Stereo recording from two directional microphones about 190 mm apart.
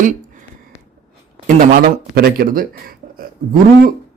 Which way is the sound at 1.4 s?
45° right (ahead or behind).